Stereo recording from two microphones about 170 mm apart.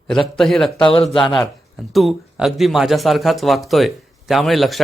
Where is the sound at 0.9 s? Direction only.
30° left (ahead or behind).